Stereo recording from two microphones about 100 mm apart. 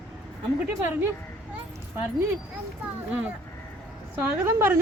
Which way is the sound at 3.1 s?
15° right (ahead or behind).